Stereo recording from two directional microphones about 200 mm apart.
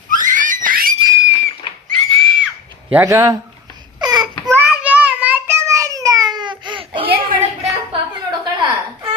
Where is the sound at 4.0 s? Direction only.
20° right (ahead or behind).